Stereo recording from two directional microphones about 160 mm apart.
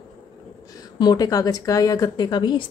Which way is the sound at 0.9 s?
25° left (ahead or behind).